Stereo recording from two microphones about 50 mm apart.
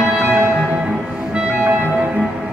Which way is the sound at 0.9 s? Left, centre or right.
Centre.